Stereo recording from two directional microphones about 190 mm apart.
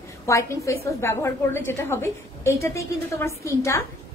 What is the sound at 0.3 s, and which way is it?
A woman's voice, 15° left (ahead or behind).